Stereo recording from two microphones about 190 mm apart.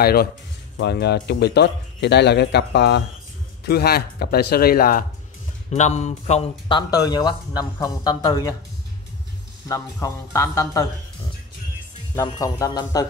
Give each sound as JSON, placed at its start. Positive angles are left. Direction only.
{"t": 0.0, "sound": "speech", "side_deg": 55}
{"t": 5.7, "sound": "speech", "side_deg": 35}
{"t": 6.9, "sound": "speech", "side_deg": 20}
{"t": 9.7, "sound": "speech", "side_deg": 15}
{"t": 12.2, "sound": "speech", "side_deg": 20}